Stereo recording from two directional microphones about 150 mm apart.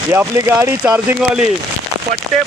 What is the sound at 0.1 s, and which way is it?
Speech, 15° right (ahead or behind).